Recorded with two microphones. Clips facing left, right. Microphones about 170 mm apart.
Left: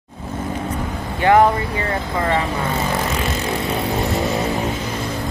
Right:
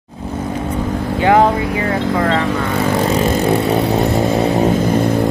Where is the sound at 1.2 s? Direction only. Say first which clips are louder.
Right 1 dB; 15° right (ahead or behind).